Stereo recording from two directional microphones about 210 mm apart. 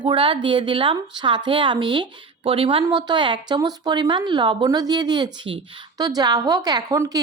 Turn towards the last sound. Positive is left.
turn(degrees=-15)  # may be behind; listen again after turning